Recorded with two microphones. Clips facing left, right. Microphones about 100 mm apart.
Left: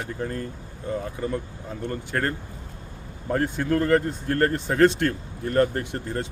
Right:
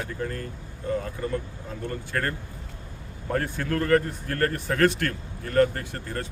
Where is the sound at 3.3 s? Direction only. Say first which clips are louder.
Left 4 dB; 20° left (ahead or behind).